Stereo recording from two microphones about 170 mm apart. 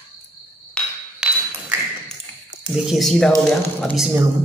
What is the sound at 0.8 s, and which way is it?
Hammer, 5° left (ahead or behind).